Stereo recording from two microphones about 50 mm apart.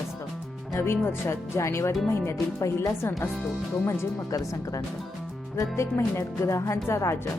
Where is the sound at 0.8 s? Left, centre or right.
Left.